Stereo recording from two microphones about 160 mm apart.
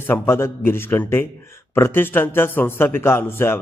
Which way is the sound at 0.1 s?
15° left (ahead or behind).